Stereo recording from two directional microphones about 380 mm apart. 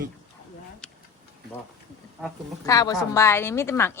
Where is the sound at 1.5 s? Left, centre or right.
Centre.